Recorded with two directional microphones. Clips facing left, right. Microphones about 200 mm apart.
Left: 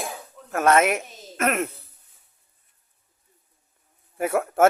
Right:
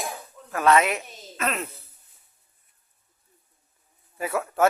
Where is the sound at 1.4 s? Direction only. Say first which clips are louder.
Left 5 dB; 60° left (ahead or behind).